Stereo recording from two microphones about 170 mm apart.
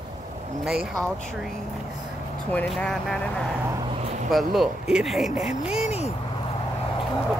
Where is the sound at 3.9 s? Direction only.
40° right (ahead or behind).